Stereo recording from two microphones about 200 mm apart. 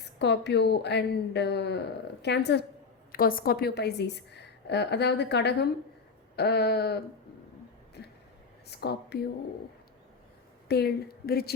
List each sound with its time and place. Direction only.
0.2 s a woman's voice: 60° left (ahead or behind)
3.1 s a woman's voice: 45° left (ahead or behind)
8.0 s a sound: 55° left (ahead or behind)
8.6 s a woman's voice: 55° left (ahead or behind)
10.7 s a woman's voice: 50° left (ahead or behind)